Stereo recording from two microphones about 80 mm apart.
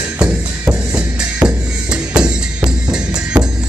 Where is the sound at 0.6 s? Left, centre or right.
Right.